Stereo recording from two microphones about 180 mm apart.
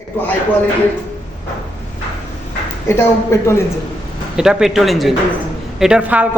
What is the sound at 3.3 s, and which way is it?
Speech, 15° left (ahead or behind).